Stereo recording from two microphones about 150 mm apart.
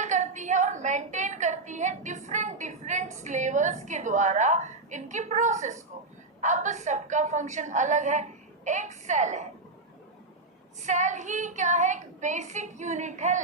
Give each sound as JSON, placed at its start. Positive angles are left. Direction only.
{"t": 0.0, "sound": "a woman's voice", "side_deg": -55}
{"t": 10.8, "sound": "a woman's voice", "side_deg": -55}